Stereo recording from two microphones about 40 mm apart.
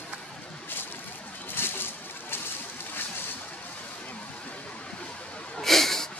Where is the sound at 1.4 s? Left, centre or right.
Left.